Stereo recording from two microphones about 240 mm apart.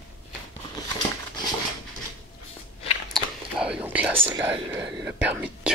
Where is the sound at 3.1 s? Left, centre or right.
Centre.